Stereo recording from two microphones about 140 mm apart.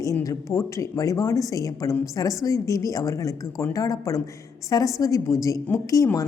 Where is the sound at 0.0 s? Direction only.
25° left (ahead or behind).